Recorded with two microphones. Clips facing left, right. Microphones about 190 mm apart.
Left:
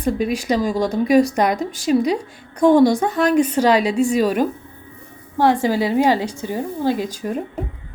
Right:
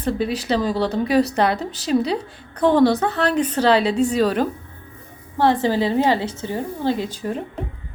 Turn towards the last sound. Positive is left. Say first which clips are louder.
# left 1 dB
turn(degrees=15)  # may be behind; listen again after turning